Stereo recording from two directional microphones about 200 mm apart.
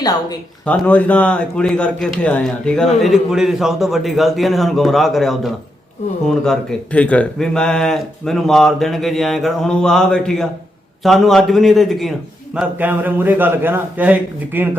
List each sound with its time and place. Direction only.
0.0 s speech: 20° left (ahead or behind)
0.6 s a man's voice: 5° left (ahead or behind); by 14.8 s 10° right (ahead or behind)